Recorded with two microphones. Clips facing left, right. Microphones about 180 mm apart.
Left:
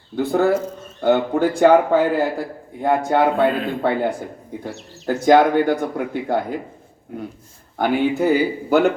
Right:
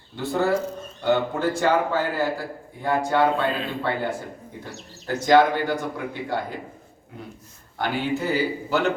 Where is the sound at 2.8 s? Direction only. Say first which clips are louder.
Left 4 dB; 55° left (ahead or behind).